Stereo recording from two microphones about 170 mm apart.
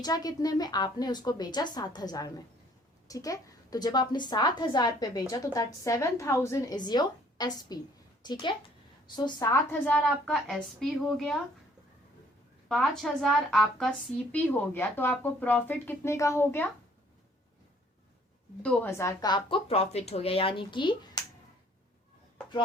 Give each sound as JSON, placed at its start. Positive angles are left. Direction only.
{"t": 0.0, "sound": "a woman's voice", "side_deg": 25}
{"t": 9.8, "sound": "a woman's voice", "side_deg": 5}
{"t": 12.6, "sound": "a woman's voice", "side_deg": 0}
{"t": 18.6, "sound": "speech", "side_deg": 10}